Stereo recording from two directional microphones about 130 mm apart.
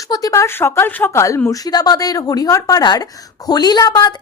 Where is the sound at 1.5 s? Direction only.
30° left (ahead or behind).